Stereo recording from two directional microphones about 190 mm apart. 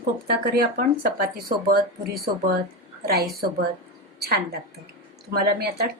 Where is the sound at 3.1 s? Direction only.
55° right (ahead or behind).